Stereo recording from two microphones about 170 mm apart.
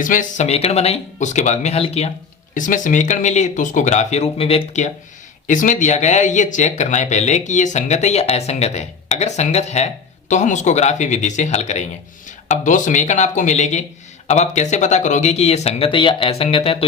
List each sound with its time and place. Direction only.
0.0 s speech: 50° left (ahead or behind)
2.6 s speech: 50° left (ahead or behind); by 16.7 s 35° left (ahead or behind)